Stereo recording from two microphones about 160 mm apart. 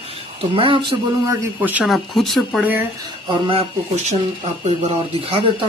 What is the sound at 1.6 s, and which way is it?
Speech, 5° right (ahead or behind).